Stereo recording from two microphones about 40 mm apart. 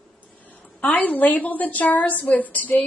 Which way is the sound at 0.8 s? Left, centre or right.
Left.